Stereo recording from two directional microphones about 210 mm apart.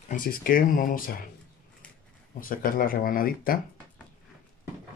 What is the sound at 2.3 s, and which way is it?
Speech, 40° left (ahead or behind).